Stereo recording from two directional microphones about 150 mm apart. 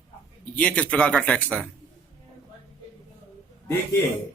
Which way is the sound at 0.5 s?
10° left (ahead or behind).